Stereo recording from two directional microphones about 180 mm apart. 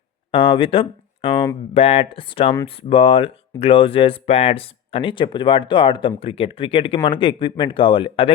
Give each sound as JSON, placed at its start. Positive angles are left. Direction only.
{"t": 0.3, "sound": "speech", "side_deg": 30}